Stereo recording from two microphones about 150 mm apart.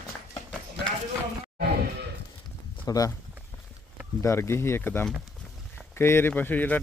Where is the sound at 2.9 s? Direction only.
25° left (ahead or behind).